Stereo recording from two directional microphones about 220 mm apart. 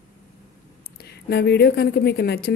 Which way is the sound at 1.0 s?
50° left (ahead or behind).